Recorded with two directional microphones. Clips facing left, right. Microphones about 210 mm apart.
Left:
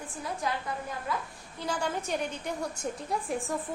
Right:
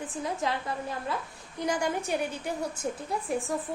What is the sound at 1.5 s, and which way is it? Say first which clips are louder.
A woman's voice: right 3 dB; 15° right (ahead or behind).